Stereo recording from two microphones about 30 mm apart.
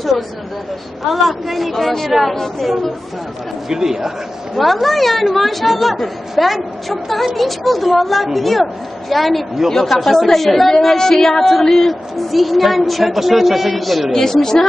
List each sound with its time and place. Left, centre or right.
1.0 s a woman's voice: centre
3.6 s a man's voice: centre
4.6 s a woman's voice: centre
14.1 s speech: centre